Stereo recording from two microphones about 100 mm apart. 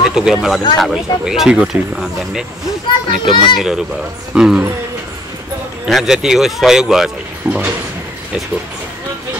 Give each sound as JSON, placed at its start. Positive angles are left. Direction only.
{"t": 0.0, "sound": "speech", "side_deg": -5}
{"t": 3.3, "sound": "a child's voice", "side_deg": 50}
{"t": 3.5, "sound": "speech", "side_deg": -5}
{"t": 5.9, "sound": "speech", "side_deg": 0}
{"t": 7.5, "sound": "a sound", "side_deg": -25}